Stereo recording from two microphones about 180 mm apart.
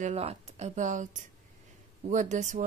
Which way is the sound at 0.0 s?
35° right (ahead or behind).